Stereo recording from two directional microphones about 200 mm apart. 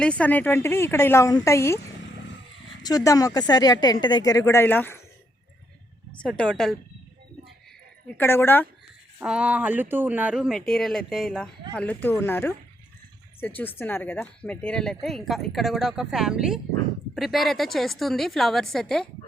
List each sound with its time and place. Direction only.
0.0 s speech: 5° left (ahead or behind)
2.8 s a woman's voice: 20° left (ahead or behind)
6.1 s speech: 5° left (ahead or behind)
8.0 s speech: 10° left (ahead or behind)
9.1 s speech: 5° right (ahead or behind)